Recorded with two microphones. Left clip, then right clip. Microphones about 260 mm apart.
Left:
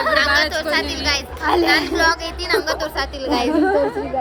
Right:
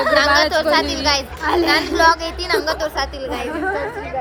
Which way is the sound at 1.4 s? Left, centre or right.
Left.